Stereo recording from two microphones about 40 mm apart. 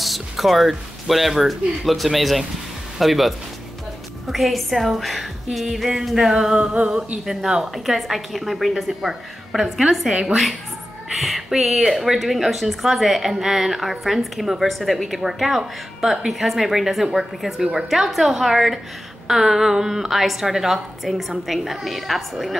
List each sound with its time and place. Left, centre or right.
0.0 s a woman's voice: centre
11.1 s speech: centre
17.6 s a woman's voice: centre